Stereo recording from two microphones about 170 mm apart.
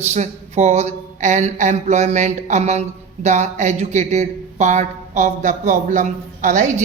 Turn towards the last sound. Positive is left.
turn(degrees=-45)  # may be behind; listen again after turning